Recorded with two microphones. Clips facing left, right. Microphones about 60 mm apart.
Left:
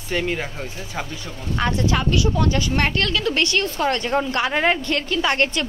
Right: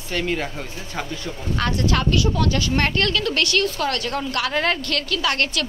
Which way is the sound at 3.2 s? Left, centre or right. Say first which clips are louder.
Even; left.